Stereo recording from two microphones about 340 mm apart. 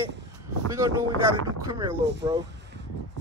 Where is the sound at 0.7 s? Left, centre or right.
Centre.